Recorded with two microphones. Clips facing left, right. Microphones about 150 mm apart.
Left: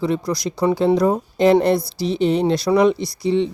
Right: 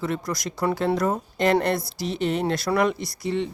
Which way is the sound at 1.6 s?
Centre (ahead or behind).